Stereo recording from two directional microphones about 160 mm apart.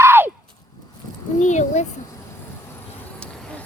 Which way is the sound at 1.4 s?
50° left (ahead or behind).